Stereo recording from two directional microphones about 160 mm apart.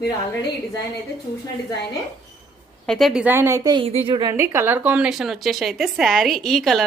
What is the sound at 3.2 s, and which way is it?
A woman's voice, 15° right (ahead or behind).